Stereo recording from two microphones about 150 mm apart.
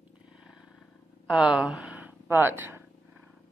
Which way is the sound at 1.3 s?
5° right (ahead or behind).